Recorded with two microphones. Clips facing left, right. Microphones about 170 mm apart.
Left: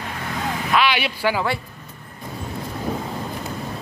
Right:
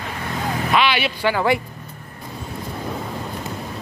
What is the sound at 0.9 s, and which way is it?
Speech, 10° left (ahead or behind).